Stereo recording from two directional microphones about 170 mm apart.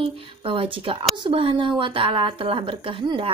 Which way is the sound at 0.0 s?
30° right (ahead or behind).